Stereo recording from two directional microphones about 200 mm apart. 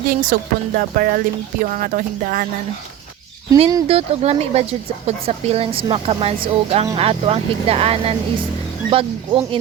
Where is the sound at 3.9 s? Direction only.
30° right (ahead or behind).